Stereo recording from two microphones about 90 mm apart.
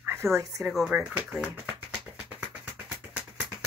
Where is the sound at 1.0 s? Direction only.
5° right (ahead or behind).